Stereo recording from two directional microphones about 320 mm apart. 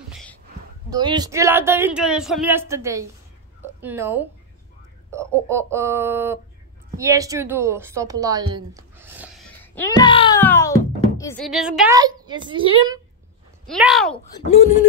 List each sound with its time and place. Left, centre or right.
0.1 s a sound: centre
0.8 s a woman's voice: centre
9.6 s a child's voice: centre
13.7 s speech: centre
14.1 s speech: centre